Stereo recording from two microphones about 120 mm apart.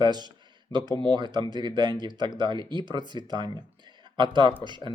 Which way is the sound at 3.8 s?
40° right (ahead or behind).